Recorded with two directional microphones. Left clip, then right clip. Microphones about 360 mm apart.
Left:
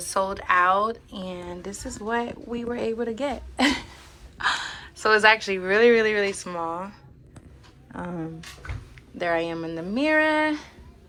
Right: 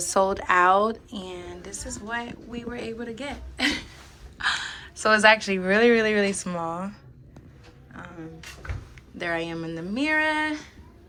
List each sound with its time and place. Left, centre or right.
0.1 s a woman's voice: centre
7.9 s speech: centre
9.1 s a woman's voice: centre